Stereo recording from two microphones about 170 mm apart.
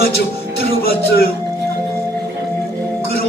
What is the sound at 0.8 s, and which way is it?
Speech, 65° left (ahead or behind).